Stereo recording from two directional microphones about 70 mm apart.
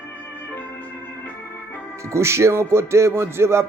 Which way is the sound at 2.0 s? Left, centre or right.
Right.